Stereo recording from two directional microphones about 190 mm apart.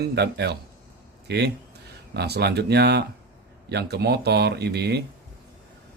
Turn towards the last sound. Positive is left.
turn(degrees=-60)  # may be behind; listen again after turning